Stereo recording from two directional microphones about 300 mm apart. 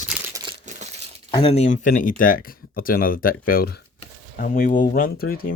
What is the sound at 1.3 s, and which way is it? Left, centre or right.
Speech, centre.